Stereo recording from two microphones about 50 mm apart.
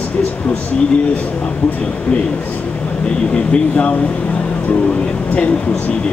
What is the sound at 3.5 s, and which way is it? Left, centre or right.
Speech, left.